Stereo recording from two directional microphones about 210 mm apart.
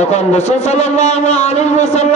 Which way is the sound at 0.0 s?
35° left (ahead or behind).